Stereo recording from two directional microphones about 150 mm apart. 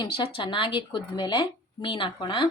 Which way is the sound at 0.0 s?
35° left (ahead or behind).